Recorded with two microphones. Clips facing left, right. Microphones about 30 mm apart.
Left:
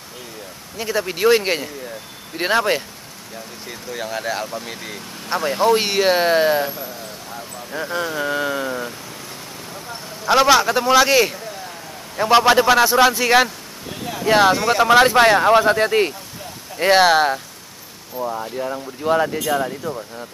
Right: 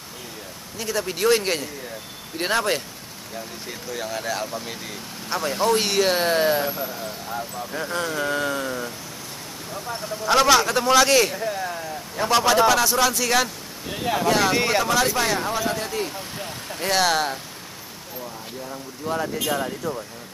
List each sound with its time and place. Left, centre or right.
0.7 s speech: centre
3.9 s speech: centre
6.7 s speech: centre
7.7 s speech: centre
10.2 s speech: centre
11.3 s a sound: centre
12.2 s a man's voice: left
18.4 s a man's voice: left
19.5 s speech: centre